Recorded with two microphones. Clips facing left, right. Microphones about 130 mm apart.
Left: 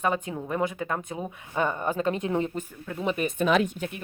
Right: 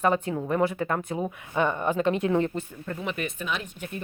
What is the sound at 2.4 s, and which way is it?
Speech, 10° left (ahead or behind).